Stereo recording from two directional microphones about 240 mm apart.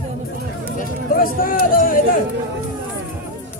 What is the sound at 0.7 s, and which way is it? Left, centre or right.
Speech, left.